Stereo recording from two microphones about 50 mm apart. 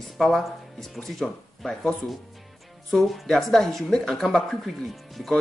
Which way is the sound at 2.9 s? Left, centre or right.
Centre.